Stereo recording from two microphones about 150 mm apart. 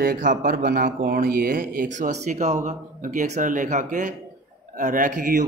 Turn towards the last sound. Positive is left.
turn(degrees=-65)  # may be behind; listen again after turning